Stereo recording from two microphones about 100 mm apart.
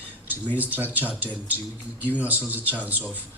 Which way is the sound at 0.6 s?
15° right (ahead or behind).